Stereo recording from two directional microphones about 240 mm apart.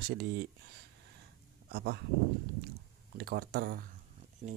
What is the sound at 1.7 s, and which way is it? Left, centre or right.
Speech, right.